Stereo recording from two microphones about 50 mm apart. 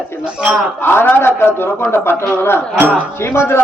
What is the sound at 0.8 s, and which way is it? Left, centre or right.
A man's voice, left.